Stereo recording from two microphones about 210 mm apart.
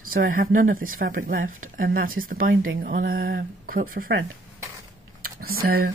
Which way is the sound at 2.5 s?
65° right (ahead or behind).